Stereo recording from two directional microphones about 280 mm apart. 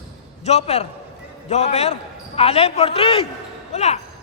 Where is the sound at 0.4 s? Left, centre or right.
Left.